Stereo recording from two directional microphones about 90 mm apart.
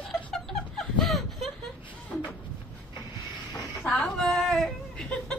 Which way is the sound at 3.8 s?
10° left (ahead or behind).